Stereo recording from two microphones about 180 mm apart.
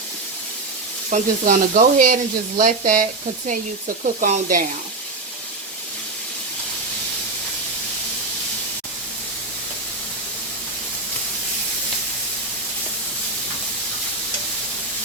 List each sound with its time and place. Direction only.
1.1 s speech: 45° right (ahead or behind)